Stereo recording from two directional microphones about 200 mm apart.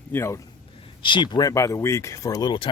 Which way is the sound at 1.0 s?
25° left (ahead or behind).